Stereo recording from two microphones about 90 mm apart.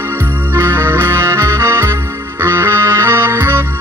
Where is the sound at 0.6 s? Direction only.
25° right (ahead or behind).